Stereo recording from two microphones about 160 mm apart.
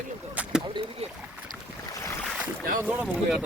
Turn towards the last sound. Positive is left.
turn(degrees=-5)  # may be behind; listen again after turning